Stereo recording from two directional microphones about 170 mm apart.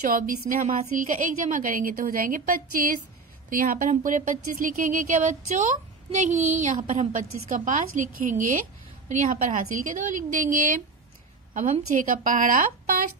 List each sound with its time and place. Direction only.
0.1 s a woman's voice: 55° right (ahead or behind)
11.9 s speech: 50° right (ahead or behind)